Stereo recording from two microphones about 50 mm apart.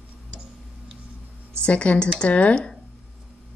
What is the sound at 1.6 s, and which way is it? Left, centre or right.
Speech, left.